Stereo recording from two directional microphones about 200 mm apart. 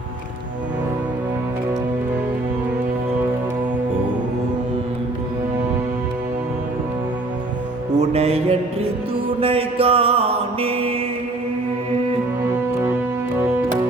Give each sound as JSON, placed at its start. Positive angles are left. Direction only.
{"t": 7.9, "sound": "music", "side_deg": -30}
{"t": 9.4, "sound": "mantra", "side_deg": -30}